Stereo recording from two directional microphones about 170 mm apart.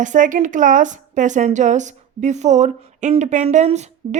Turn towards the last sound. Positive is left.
turn(degrees=-40)  # may be behind; listen again after turning